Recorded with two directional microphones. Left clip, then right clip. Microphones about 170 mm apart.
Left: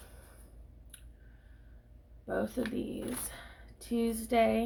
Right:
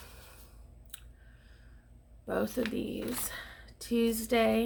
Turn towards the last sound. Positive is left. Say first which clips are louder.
# even
turn(degrees=-30)  # may be behind; listen again after turning